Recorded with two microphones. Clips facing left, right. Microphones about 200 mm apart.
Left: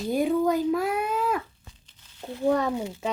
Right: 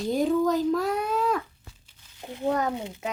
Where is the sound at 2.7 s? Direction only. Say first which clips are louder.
Left 3 dB; 20° right (ahead or behind).